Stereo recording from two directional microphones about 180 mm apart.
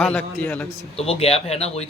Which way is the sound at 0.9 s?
30° left (ahead or behind).